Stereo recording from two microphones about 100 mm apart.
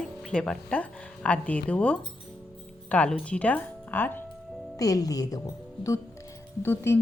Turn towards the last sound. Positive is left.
turn(degrees=25)  # may be behind; listen again after turning